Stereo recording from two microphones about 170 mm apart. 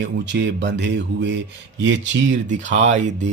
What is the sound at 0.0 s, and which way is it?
Speech, 90° right.